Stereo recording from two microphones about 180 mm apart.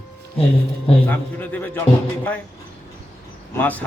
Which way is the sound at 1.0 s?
10° left (ahead or behind).